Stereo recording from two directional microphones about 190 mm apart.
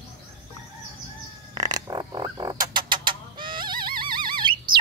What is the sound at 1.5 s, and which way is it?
Frog, 20° right (ahead or behind).